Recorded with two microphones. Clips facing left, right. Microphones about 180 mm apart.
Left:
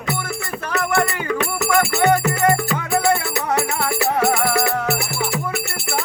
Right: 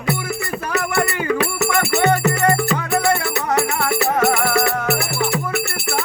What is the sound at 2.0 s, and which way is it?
Music, 10° left (ahead or behind).